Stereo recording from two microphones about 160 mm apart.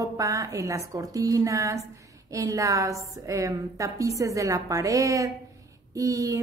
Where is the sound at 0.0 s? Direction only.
20° right (ahead or behind).